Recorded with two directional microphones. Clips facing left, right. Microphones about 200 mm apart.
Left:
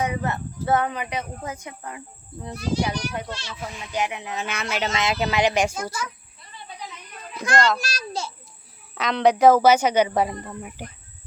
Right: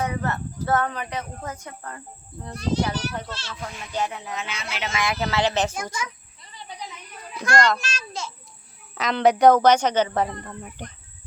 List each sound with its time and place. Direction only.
0.0 s speech: 15° left (ahead or behind)
4.4 s speech: 55° left (ahead or behind)
4.8 s speech: 25° left (ahead or behind)
7.5 s a child's voice: centre (ahead or behind)
7.8 s a child's voice: 35° left (ahead or behind)
9.0 s speech: centre (ahead or behind)